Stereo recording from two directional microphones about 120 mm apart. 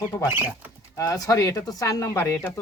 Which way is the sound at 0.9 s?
30° left (ahead or behind).